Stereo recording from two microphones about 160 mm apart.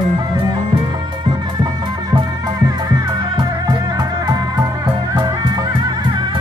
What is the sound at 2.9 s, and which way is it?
Music, 25° right (ahead or behind).